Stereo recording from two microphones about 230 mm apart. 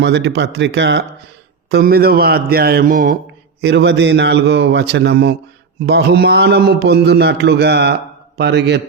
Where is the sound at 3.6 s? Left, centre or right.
Right.